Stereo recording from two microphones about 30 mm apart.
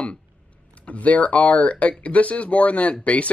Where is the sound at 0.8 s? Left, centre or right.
Left.